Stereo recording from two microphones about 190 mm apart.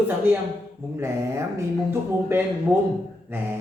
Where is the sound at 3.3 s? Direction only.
10° right (ahead or behind).